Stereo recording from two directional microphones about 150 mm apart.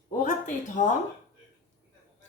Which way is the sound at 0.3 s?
60° left (ahead or behind).